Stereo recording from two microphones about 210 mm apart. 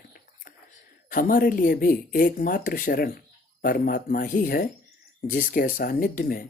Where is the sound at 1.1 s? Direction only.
40° left (ahead or behind).